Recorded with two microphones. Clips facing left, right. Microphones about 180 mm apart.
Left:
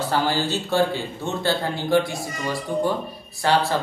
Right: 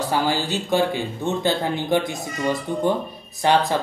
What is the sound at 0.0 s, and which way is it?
Speech, 15° right (ahead or behind).